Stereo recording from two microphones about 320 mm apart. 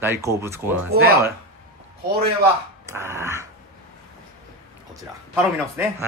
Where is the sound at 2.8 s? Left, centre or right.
Centre.